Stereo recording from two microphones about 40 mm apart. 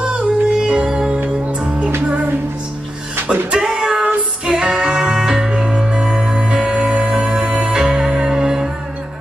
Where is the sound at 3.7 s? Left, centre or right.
Centre.